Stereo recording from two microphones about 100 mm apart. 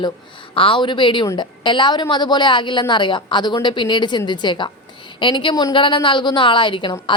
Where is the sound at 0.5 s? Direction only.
60° left (ahead or behind).